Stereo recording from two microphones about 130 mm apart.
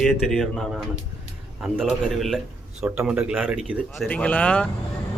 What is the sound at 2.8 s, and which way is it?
Speech, 10° right (ahead or behind).